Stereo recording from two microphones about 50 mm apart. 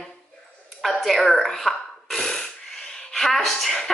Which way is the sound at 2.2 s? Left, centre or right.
Centre.